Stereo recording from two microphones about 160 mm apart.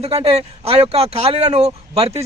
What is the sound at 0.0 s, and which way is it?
Speech, 40° right (ahead or behind).